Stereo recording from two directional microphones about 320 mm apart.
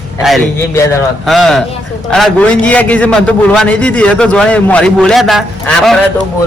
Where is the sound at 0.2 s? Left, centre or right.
Centre.